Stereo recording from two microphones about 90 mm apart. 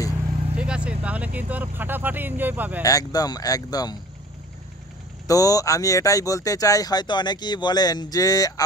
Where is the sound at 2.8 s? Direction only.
40° left (ahead or behind).